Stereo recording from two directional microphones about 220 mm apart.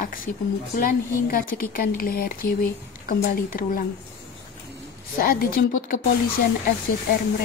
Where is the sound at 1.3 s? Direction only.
40° left (ahead or behind).